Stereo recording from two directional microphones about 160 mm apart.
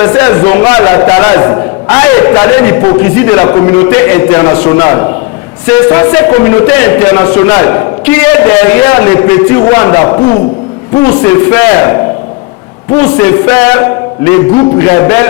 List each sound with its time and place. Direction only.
0.0 s a man's voice: 15° left (ahead or behind)